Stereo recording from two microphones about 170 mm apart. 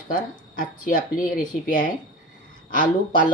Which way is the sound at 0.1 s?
55° left (ahead or behind).